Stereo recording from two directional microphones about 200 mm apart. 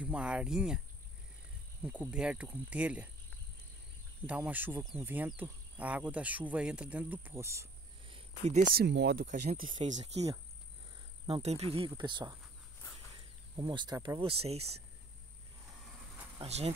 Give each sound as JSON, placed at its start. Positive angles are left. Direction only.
{"t": 0.0, "sound": "speech", "side_deg": -5}
{"t": 1.8, "sound": "insect", "side_deg": -5}
{"t": 4.3, "sound": "insect", "side_deg": -10}
{"t": 8.1, "sound": "cricket", "side_deg": -35}
{"t": 8.7, "sound": "speech", "side_deg": -55}
{"t": 9.8, "sound": "speech", "side_deg": -35}
{"t": 11.2, "sound": "speech", "side_deg": -30}
{"t": 13.6, "sound": "speech", "side_deg": -20}
{"t": 16.3, "sound": "speech", "side_deg": -30}